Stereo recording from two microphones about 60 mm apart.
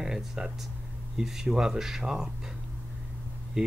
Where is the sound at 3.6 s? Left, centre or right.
Centre.